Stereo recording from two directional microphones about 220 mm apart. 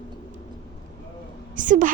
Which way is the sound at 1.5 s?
35° right (ahead or behind).